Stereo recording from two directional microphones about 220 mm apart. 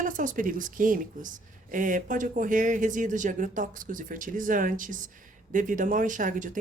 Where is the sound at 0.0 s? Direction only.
35° right (ahead or behind).